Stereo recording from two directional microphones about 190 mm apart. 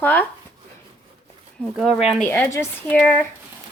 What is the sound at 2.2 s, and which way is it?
Speech, 10° left (ahead or behind).